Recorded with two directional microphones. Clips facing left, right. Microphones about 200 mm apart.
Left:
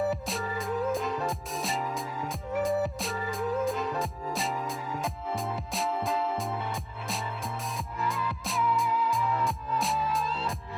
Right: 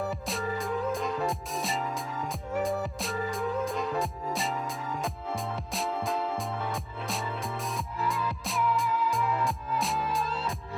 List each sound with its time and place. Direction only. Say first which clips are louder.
0.0 s music: left 2 dB; centre (ahead or behind)
8.0 s music: even; centre (ahead or behind)